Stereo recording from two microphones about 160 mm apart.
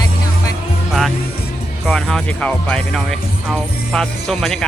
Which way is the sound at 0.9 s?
Centre (ahead or behind).